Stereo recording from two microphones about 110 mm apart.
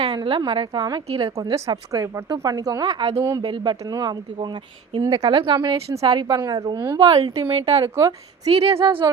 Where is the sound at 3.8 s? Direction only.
35° right (ahead or behind).